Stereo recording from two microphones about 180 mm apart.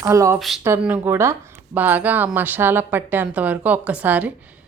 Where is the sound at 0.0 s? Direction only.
15° right (ahead or behind).